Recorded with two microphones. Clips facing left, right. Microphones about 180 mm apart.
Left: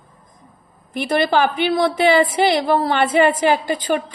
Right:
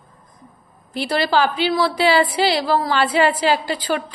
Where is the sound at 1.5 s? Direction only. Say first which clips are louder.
Left 1 dB; 55° left (ahead or behind).